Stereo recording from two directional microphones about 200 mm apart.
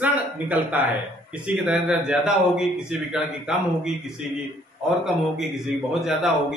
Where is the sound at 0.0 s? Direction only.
10° right (ahead or behind).